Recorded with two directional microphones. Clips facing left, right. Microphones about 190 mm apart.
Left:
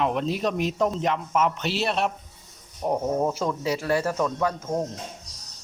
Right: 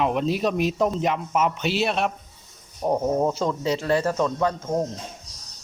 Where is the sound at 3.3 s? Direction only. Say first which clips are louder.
Right 2 dB; 10° left (ahead or behind).